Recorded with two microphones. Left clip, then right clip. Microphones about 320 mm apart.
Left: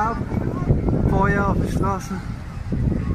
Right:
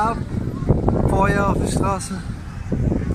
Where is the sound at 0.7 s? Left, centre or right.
Right.